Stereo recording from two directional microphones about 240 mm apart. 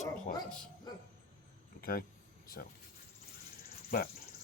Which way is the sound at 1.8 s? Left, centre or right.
Left.